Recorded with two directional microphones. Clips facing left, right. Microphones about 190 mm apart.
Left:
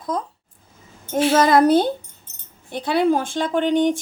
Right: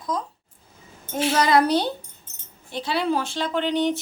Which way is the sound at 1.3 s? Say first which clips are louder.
Left 4 dB; 50° left (ahead or behind).